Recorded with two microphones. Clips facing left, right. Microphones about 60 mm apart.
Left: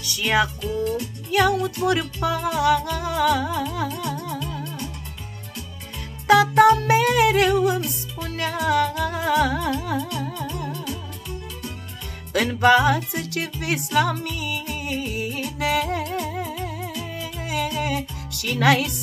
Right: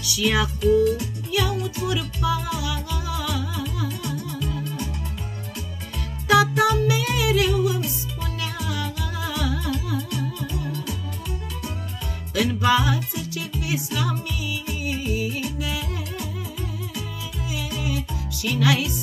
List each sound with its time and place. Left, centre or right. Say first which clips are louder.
0.0 s music: left 1 dB; left
6.2 s music: left 4 dB; left
12.4 s music: left 4 dB; left
18.5 s speech: left 3 dB; left